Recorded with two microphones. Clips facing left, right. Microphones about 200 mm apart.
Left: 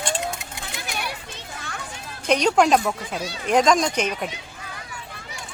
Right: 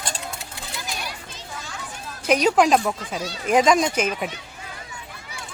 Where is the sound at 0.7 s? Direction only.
60° left (ahead or behind).